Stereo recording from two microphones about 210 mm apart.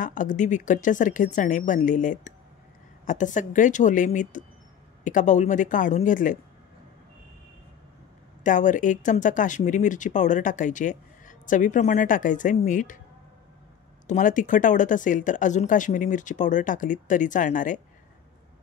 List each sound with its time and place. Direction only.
0.0 s speech: 40° left (ahead or behind)
8.5 s speech: 35° left (ahead or behind)
14.0 s speech: 35° left (ahead or behind)